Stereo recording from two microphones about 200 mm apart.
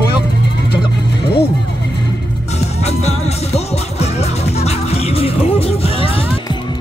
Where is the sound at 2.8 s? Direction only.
30° left (ahead or behind).